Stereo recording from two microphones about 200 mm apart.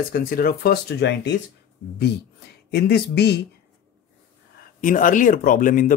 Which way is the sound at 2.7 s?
50° left (ahead or behind).